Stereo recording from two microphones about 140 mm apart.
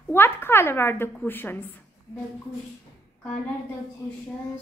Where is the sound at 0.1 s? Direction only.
15° left (ahead or behind).